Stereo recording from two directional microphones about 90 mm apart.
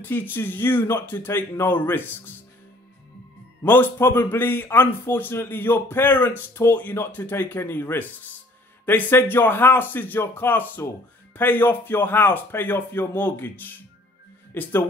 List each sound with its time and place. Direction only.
0.0 s a man's voice: 25° left (ahead or behind)
3.6 s a man's voice: 20° left (ahead or behind)